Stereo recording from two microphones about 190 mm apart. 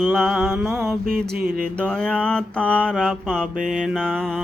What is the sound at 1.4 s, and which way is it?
Mantra, 50° right (ahead or behind).